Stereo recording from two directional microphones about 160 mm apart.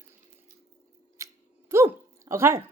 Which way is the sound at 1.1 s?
20° right (ahead or behind).